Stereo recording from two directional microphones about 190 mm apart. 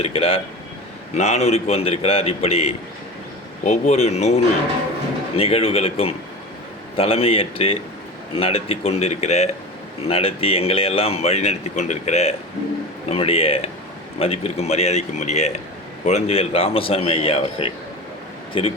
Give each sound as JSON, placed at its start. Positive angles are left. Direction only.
{"t": 0.0, "sound": "a man's voice", "side_deg": 30}
{"t": 5.4, "sound": "a man's voice", "side_deg": 30}